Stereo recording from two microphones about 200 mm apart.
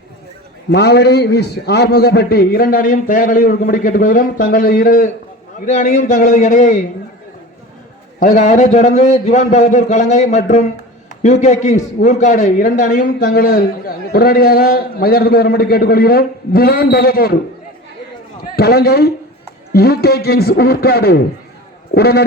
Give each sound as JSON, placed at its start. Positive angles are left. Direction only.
{"t": 0.7, "sound": "a man's voice", "side_deg": 55}
{"t": 8.2, "sound": "a man's voice", "side_deg": 40}
{"t": 18.4, "sound": "a man's voice", "side_deg": 50}